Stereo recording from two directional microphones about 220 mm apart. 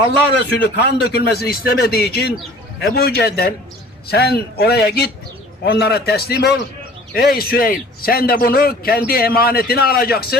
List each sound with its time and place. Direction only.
0.6 s a man's voice: 45° left (ahead or behind)